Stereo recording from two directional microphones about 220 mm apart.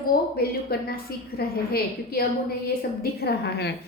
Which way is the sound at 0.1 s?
45° left (ahead or behind).